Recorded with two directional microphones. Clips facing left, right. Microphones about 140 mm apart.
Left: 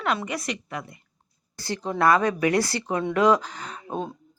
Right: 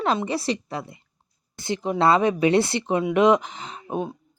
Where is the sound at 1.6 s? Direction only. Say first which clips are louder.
Right 2 dB; 20° right (ahead or behind).